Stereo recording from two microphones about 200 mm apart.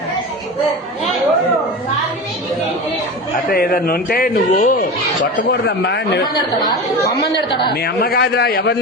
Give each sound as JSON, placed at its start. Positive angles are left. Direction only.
{"t": 3.5, "sound": "a man's voice", "side_deg": 50}
{"t": 6.2, "sound": "speech", "side_deg": 20}
{"t": 7.7, "sound": "speech", "side_deg": 55}